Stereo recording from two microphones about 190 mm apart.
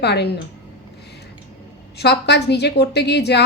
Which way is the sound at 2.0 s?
60° left (ahead or behind).